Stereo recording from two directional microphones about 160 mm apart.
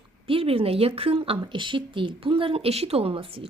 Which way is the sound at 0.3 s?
35° right (ahead or behind).